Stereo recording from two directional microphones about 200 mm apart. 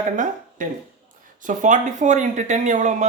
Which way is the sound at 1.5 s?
40° right (ahead or behind).